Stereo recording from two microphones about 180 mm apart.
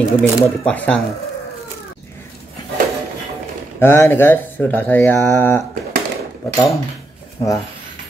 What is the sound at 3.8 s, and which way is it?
Speech, 15° left (ahead or behind).